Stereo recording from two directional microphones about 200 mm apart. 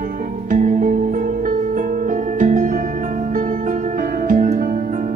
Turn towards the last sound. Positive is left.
turn(degrees=-40)  # may be behind; listen again after turning